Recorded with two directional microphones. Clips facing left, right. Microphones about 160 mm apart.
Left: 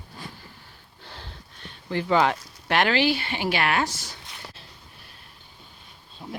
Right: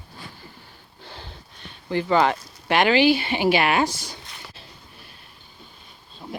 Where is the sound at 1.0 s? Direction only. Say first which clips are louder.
Right 2 dB; centre (ahead or behind).